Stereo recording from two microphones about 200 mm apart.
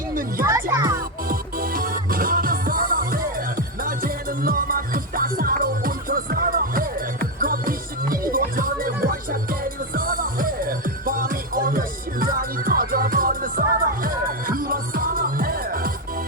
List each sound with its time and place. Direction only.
0.1 s music: 45° right (ahead or behind)
0.4 s music: 15° right (ahead or behind)
1.3 s music: 45° right (ahead or behind)